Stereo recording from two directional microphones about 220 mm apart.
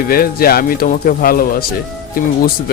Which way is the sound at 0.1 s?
40° left (ahead or behind).